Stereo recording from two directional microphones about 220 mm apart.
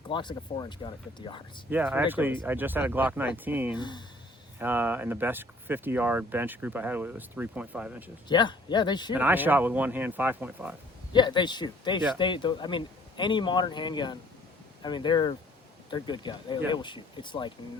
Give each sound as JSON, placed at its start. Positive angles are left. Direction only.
{"t": 0.1, "sound": "speech", "side_deg": 20}
{"t": 1.7, "sound": "speech", "side_deg": -10}
{"t": 3.8, "sound": "speech", "side_deg": 20}
{"t": 4.6, "sound": "speech", "side_deg": -10}
{"t": 8.3, "sound": "speech", "side_deg": 20}
{"t": 9.1, "sound": "speech", "side_deg": -10}
{"t": 11.1, "sound": "speech", "side_deg": 20}